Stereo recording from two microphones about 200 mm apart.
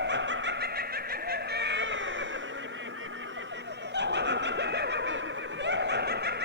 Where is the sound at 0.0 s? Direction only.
65° right (ahead or behind).